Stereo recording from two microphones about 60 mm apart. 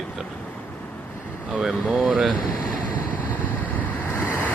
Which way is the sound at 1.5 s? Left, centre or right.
Centre.